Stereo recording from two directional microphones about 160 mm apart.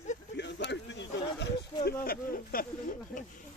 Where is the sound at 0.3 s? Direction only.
90° left.